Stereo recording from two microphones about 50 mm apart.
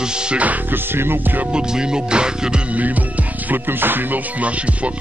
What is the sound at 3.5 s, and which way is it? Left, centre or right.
Music, right.